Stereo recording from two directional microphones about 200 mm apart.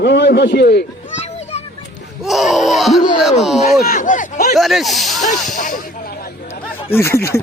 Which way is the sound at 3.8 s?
45° left (ahead or behind).